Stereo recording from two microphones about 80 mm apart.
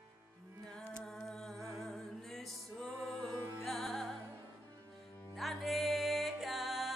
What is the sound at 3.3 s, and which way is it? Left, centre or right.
Music, right.